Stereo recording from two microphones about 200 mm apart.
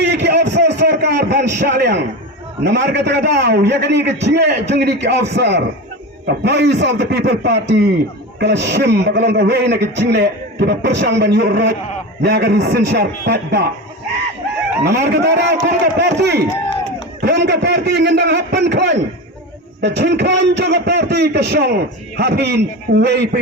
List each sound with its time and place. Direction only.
0.0 s a sound: 60° right (ahead or behind)
2.6 s a man's voice: 60° right (ahead or behind)
14.8 s a man's voice: 55° right (ahead or behind)